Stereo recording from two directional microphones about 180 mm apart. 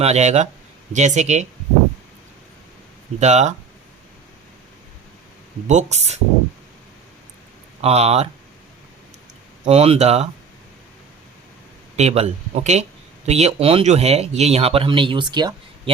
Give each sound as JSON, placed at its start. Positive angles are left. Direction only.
{"t": 0.0, "sound": "speech", "side_deg": -35}
{"t": 3.2, "sound": "speech", "side_deg": -40}
{"t": 5.6, "sound": "speech", "side_deg": -40}
{"t": 7.8, "sound": "speech", "side_deg": -35}
{"t": 9.6, "sound": "speech", "side_deg": -35}
{"t": 11.9, "sound": "speech", "side_deg": -35}